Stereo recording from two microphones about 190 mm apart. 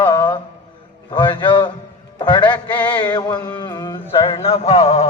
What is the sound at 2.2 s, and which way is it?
Music, 25° left (ahead or behind).